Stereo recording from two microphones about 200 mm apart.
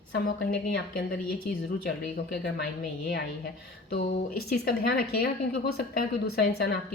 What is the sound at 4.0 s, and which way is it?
Speech, 50° left (ahead or behind).